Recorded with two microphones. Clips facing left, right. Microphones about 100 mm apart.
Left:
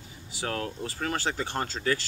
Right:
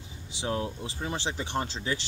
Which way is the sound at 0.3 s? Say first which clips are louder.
Right 1 dB; 20° right (ahead or behind).